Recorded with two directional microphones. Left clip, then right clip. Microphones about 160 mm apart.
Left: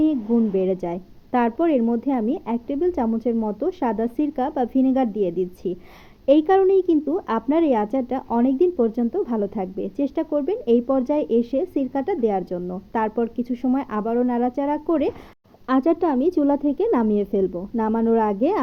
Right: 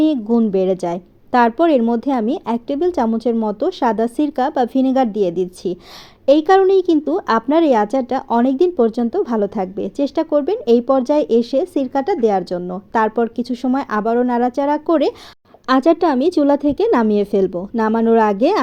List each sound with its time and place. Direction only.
0.0 s a woman's voice: 40° right (ahead or behind)